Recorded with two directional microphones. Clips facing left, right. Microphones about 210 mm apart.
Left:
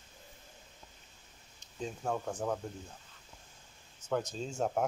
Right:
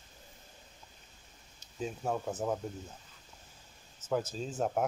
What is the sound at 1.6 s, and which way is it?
Speech, 5° right (ahead or behind).